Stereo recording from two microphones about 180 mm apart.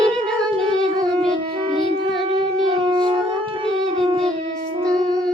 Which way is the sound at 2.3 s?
30° right (ahead or behind).